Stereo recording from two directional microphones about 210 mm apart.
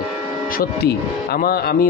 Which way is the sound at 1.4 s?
50° left (ahead or behind).